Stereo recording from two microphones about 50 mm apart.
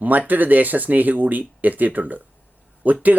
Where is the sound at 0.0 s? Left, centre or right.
Right.